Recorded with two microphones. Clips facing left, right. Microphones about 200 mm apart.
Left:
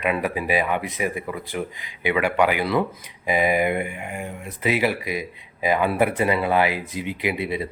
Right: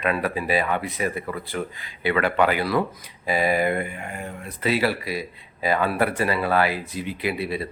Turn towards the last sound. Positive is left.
turn(degrees=20)  # may be behind; listen again after turning